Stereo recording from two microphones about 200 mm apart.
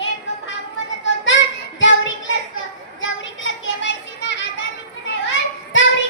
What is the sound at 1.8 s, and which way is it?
Child singing, 70° left (ahead or behind).